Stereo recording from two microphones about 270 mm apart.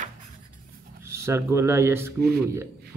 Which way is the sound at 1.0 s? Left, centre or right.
Centre.